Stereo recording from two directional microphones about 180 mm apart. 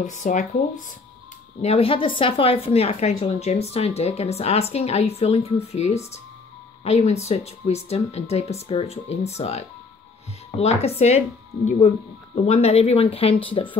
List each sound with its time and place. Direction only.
0.0 s speech: 45° left (ahead or behind)
1.6 s a woman's voice: 35° left (ahead or behind)